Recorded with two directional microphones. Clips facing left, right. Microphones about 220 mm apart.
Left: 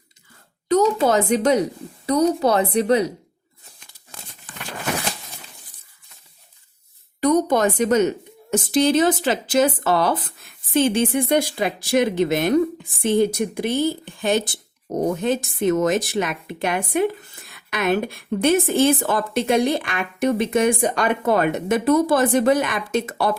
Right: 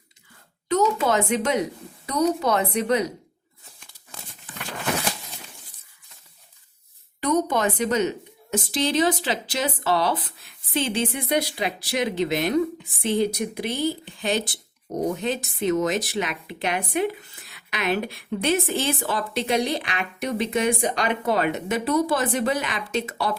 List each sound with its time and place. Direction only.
0.7 s a woman's voice: 35° left (ahead or behind)
7.2 s a woman's voice: 40° left (ahead or behind)